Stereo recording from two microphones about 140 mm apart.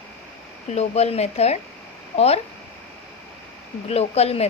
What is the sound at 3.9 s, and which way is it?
Speech, 45° left (ahead or behind).